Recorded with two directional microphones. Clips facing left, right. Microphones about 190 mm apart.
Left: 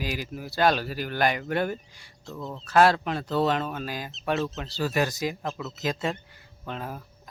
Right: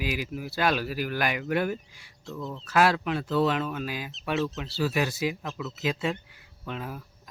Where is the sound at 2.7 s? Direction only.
40° left (ahead or behind).